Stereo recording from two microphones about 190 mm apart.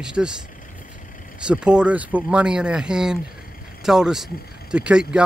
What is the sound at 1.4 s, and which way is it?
Speech, 5° right (ahead or behind).